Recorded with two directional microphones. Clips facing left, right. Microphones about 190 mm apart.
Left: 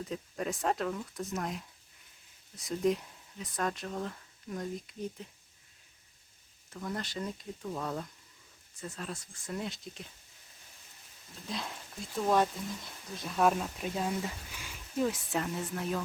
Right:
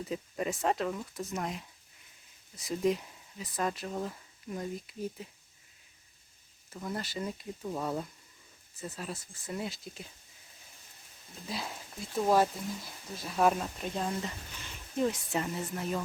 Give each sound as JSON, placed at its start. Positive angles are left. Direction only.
{"t": 0.1, "sound": "speech", "side_deg": -5}
{"t": 6.8, "sound": "speech", "side_deg": -5}
{"t": 11.4, "sound": "speech", "side_deg": -5}